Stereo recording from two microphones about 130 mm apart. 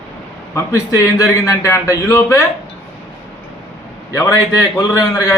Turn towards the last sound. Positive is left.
turn(degrees=25)  # may be behind; listen again after turning